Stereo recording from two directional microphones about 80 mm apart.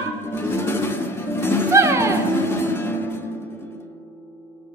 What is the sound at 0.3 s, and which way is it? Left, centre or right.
Music, left.